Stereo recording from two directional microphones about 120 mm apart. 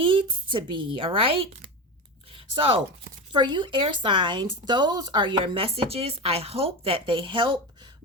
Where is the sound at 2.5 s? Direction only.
50° right (ahead or behind).